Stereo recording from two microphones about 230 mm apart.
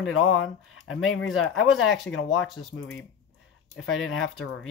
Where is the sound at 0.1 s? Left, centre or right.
Left.